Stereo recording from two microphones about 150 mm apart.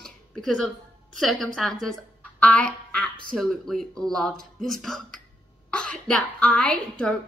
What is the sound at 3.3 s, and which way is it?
Speech, centre (ahead or behind).